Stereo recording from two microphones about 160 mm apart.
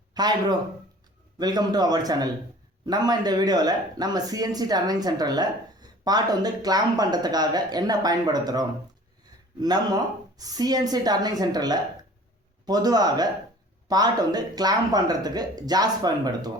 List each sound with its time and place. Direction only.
0.1 s speech: 25° right (ahead or behind)